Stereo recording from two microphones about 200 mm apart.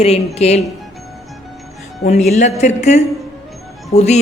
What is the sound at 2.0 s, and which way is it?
A man's voice, 35° left (ahead or behind).